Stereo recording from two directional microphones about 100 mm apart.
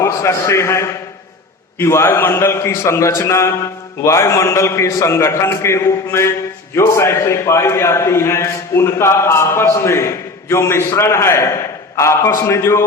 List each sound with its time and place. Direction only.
0.0 s a man's voice: 30° left (ahead or behind)